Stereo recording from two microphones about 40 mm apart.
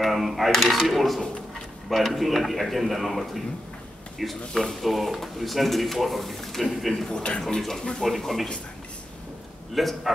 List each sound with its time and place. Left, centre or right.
0.0 s cutlery: centre
0.6 s speech: centre
7.1 s speech: centre
8.0 s speech: centre
9.8 s speech: centre